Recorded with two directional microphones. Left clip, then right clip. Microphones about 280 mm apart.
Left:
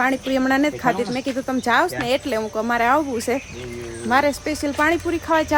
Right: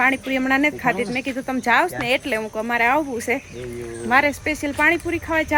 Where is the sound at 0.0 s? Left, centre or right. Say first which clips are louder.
Even; centre.